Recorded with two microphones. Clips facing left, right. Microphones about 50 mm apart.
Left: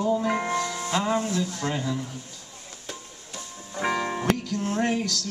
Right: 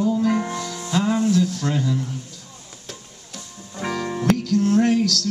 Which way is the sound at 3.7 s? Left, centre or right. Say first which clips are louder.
Even; centre.